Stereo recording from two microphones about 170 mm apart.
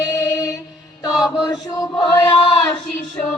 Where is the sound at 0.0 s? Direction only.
20° left (ahead or behind).